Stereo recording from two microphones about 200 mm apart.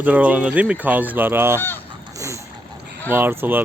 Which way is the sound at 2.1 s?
15° right (ahead or behind).